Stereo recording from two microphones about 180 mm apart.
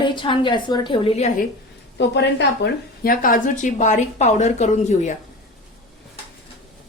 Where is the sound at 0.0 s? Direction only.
25° left (ahead or behind).